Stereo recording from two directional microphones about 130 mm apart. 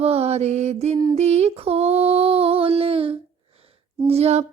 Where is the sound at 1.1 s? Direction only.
55° right (ahead or behind).